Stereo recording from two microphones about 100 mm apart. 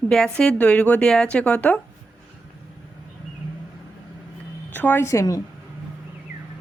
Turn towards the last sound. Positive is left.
turn(degrees=30)  # may be behind; listen again after turning